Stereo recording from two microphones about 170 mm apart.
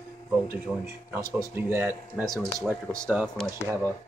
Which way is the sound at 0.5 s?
15° right (ahead or behind).